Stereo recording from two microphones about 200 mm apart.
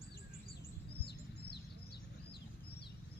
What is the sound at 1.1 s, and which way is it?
Bird, 55° left (ahead or behind).